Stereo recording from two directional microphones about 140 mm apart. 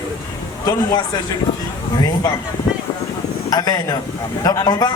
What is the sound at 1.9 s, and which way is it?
Speech, 30° left (ahead or behind).